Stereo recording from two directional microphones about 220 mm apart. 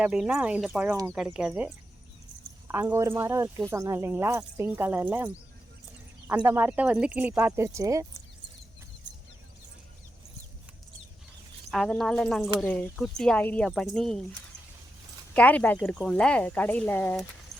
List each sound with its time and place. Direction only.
0.0 s speech: 5° right (ahead or behind)
2.7 s speech: 10° right (ahead or behind)
11.7 s speech: centre (ahead or behind)
15.3 s speech: 5° left (ahead or behind)
17.5 s clip-clop: 30° right (ahead or behind)